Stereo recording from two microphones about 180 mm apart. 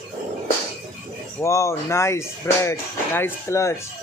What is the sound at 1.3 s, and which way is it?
Speech, 15° left (ahead or behind).